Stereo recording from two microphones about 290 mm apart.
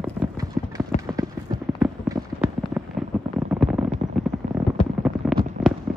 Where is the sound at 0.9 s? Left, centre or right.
Left.